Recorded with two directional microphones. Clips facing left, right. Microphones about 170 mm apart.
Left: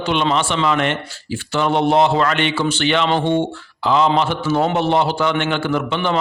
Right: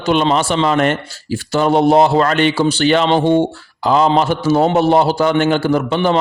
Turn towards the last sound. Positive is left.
turn(degrees=-40)  # may be behind; listen again after turning